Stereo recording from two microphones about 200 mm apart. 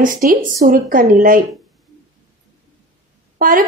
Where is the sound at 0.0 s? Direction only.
45° right (ahead or behind).